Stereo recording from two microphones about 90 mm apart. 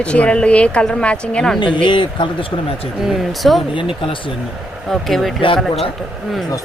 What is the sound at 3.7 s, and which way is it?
Speech, 75° left (ahead or behind).